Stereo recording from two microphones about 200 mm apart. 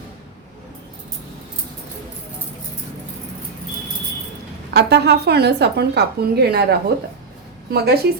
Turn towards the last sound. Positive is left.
turn(degrees=-50)  # may be behind; listen again after turning